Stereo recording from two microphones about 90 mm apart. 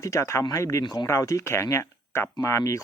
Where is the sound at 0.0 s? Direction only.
35° left (ahead or behind).